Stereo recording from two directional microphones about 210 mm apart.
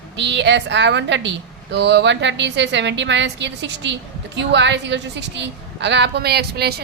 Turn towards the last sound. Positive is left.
turn(degrees=-50)  # may be behind; listen again after turning